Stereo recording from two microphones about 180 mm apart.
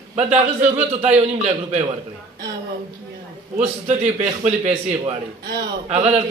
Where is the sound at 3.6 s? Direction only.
35° right (ahead or behind).